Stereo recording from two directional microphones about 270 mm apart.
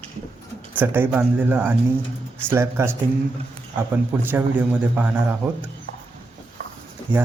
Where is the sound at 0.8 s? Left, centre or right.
Centre.